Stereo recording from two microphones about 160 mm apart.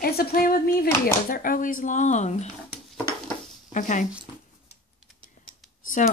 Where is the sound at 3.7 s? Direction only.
55° left (ahead or behind).